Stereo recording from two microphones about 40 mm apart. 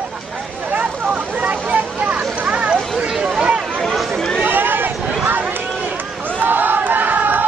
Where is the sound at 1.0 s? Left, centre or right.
Right.